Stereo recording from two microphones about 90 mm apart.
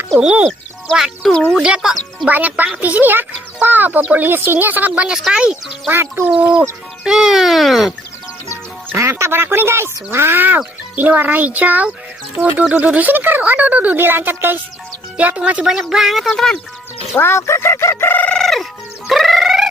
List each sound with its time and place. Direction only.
0.2 s speech: 15° right (ahead or behind)
1.5 s speech: 5° right (ahead or behind)
5.9 s speech: 25° right (ahead or behind)
6.3 s speech: 10° right (ahead or behind)
9.2 s speech: 25° right (ahead or behind); by 16.5 s 5° left (ahead or behind)
17.2 s speech: 30° left (ahead or behind)
18.1 s chicken: 15° left (ahead or behind)
18.4 s fowl: centre (ahead or behind)